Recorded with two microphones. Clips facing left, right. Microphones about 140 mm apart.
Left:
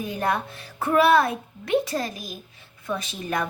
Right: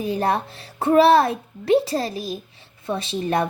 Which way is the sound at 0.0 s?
30° right (ahead or behind).